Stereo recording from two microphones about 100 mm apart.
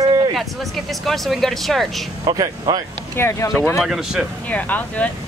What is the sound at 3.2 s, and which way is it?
Speech, 30° left (ahead or behind).